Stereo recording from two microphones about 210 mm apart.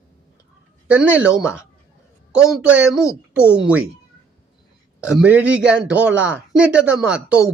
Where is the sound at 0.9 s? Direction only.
5° right (ahead or behind).